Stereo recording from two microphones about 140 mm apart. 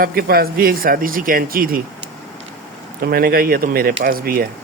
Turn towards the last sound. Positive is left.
turn(degrees=-90)